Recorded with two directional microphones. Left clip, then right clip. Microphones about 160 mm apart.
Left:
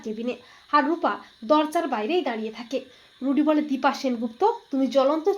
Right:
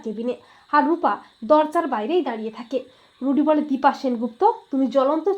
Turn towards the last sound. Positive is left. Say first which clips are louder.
# right 2 dB
turn(degrees=-30)  # may be behind; listen again after turning